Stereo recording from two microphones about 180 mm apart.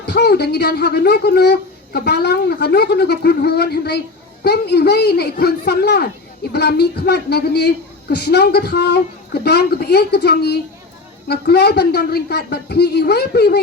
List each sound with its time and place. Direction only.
0.0 s a woman's voice: 65° left (ahead or behind)